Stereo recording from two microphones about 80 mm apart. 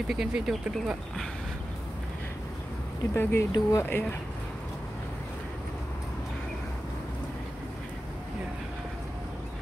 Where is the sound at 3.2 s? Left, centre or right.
Left.